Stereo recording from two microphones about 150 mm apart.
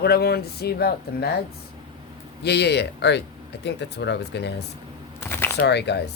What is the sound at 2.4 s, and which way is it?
Speech, 90° left.